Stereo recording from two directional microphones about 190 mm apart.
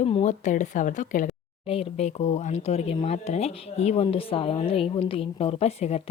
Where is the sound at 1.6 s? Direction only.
30° left (ahead or behind).